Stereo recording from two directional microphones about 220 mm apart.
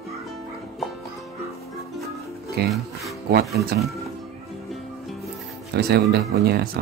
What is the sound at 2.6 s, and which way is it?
Speech, 45° right (ahead or behind).